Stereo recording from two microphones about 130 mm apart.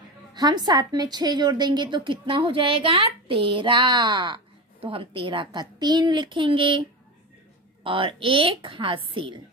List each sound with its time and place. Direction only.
0.3 s a woman's voice: 35° right (ahead or behind)
7.8 s a woman's voice: 40° right (ahead or behind)